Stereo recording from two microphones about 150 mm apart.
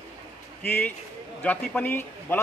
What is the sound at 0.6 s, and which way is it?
A man's voice, 15° left (ahead or behind).